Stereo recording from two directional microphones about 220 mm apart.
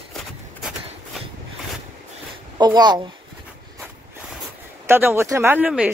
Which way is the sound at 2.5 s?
20° right (ahead or behind).